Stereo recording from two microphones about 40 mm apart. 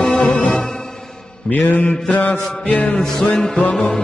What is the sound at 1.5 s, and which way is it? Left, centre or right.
Mantra, left.